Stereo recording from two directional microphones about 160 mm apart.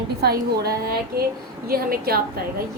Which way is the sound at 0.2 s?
85° right.